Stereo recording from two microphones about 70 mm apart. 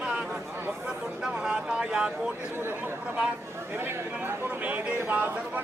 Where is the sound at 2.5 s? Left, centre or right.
Right.